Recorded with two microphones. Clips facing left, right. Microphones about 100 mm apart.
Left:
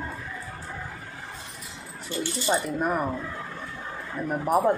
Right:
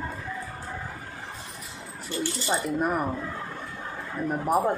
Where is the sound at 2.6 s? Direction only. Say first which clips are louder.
Even; centre (ahead or behind).